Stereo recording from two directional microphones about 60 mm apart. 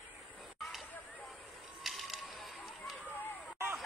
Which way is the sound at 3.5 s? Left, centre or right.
Right.